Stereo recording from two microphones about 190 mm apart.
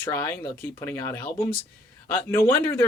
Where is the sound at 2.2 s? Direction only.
15° left (ahead or behind).